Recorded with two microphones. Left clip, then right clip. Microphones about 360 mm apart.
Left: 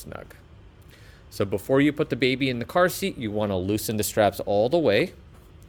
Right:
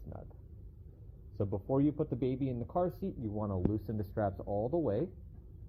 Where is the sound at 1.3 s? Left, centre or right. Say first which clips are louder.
Left 11 dB; left.